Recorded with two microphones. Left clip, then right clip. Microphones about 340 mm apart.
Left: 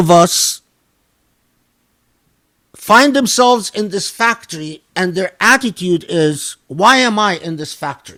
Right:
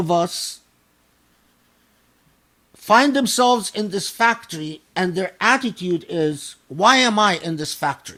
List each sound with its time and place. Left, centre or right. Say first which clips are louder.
0.0 s speech: left 11 dB; left
2.7 s a man's voice: left 6 dB; left
6.8 s speech: left 4 dB; left